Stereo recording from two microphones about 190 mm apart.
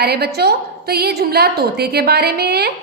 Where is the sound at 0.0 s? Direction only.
55° right (ahead or behind).